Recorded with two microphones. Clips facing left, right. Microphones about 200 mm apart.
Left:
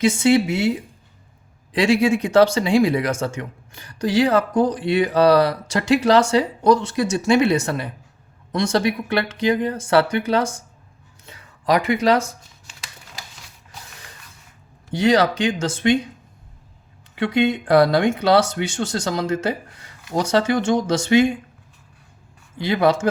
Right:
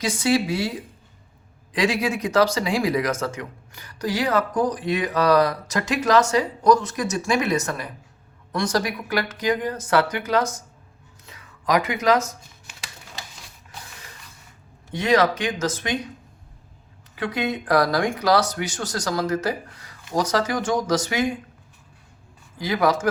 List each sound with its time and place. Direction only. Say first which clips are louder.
0.0 s speech: left 5 dB; 25° left (ahead or behind)
1.7 s speech: left 6 dB; 30° left (ahead or behind)
14.9 s speech: left 3 dB; 30° left (ahead or behind)
17.2 s speech: left 6 dB; 25° left (ahead or behind)
22.5 s speech: left 3 dB; 25° left (ahead or behind)